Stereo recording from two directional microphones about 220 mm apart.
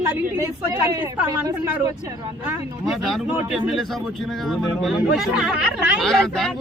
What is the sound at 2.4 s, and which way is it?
Speech, centre (ahead or behind).